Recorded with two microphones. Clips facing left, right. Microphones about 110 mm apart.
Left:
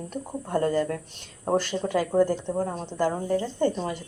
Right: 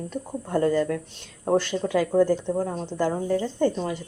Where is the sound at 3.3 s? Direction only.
20° left (ahead or behind).